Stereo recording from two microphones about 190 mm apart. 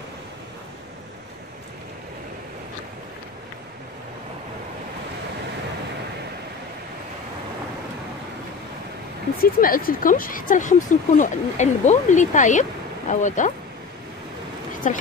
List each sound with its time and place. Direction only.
9.4 s speech: 50° left (ahead or behind)
14.8 s speech: 40° left (ahead or behind)